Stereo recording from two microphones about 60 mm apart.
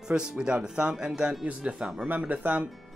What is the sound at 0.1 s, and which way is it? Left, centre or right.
Speech, centre.